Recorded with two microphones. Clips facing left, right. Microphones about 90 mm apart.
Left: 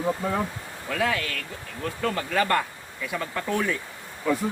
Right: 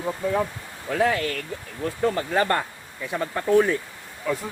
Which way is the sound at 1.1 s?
40° right (ahead or behind).